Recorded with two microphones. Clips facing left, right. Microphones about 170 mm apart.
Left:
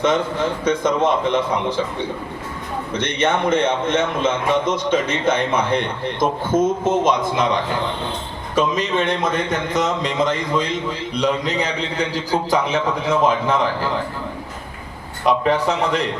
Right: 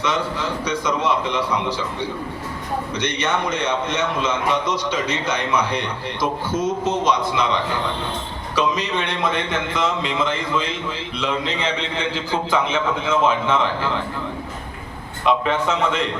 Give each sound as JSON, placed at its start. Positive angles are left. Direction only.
{"t": 0.0, "sound": "a man's voice", "side_deg": 50}
{"t": 15.2, "sound": "a man's voice", "side_deg": 40}